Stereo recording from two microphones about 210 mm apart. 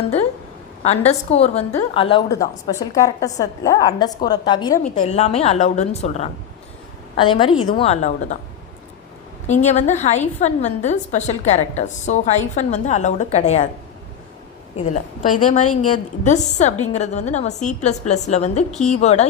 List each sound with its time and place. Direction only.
0.8 s a woman's voice: 30° left (ahead or behind)
4.9 s a woman's voice: 30° left (ahead or behind)
9.5 s a woman's voice: 35° left (ahead or behind)
14.8 s a woman's voice: 40° left (ahead or behind)